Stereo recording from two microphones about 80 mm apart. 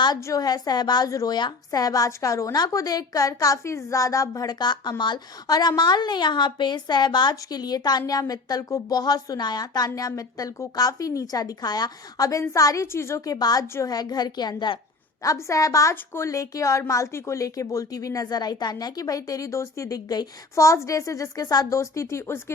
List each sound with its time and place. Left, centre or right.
0.2 s a woman's voice: left
1.4 s a woman's voice: left
13.2 s a woman's voice: left
15.2 s a woman's voice: left
21.8 s speech: left